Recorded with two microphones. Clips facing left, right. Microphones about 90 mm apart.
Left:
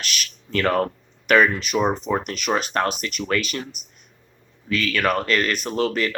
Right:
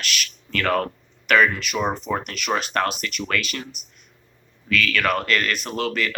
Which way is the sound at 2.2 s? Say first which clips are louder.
Left 2 dB; 40° left (ahead or behind).